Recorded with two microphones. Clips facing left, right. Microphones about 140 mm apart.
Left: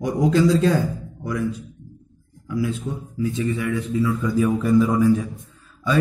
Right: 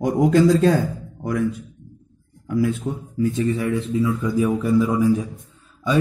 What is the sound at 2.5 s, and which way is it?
Speech, 50° right (ahead or behind).